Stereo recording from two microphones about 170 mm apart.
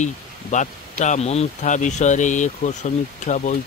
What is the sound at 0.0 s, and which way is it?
Speech, 45° left (ahead or behind).